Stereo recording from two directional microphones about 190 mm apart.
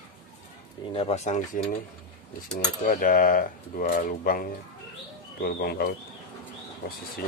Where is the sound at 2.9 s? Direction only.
45° left (ahead or behind).